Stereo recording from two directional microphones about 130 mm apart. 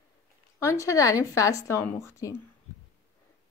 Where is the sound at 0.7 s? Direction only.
25° left (ahead or behind).